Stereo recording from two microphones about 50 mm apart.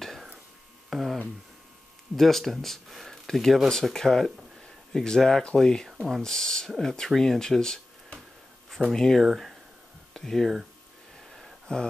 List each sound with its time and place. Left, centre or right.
0.8 s mains hum: centre
2.1 s speech: centre
5.9 s speech: centre
6.2 s speech: centre
9.2 s speech: centre
10.1 s speech: centre
11.6 s speech: centre